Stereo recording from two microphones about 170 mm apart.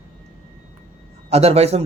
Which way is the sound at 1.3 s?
40° right (ahead or behind).